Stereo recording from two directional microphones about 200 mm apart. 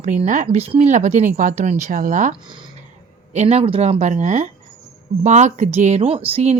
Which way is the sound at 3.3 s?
35° right (ahead or behind).